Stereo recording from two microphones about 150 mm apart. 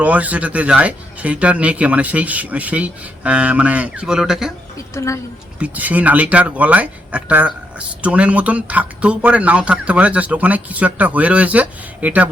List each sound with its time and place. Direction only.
0.0 s speech: 10° right (ahead or behind)
4.9 s a woman's voice: 20° left (ahead or behind)
5.5 s speech: 10° right (ahead or behind)